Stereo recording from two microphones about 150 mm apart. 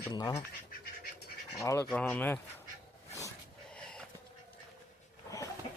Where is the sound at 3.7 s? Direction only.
5° left (ahead or behind).